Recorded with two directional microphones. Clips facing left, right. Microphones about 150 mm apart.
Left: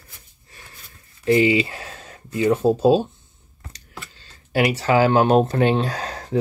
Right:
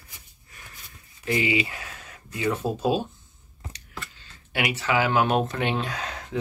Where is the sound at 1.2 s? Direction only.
30° left (ahead or behind).